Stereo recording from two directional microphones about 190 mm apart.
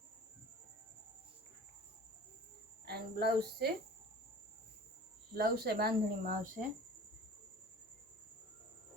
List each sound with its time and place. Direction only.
2.8 s speech: 60° right (ahead or behind)
5.4 s speech: 55° right (ahead or behind)